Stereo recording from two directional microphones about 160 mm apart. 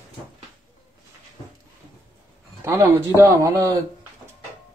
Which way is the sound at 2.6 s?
15° right (ahead or behind).